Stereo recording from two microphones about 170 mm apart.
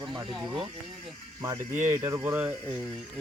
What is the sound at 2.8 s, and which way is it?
Speech, centre (ahead or behind).